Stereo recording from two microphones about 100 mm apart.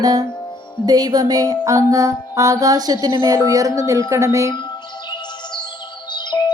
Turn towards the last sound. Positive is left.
turn(degrees=50)  # may be behind; listen again after turning